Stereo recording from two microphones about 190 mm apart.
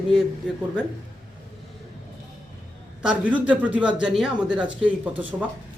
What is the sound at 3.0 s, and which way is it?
A man's voice, 5° right (ahead or behind).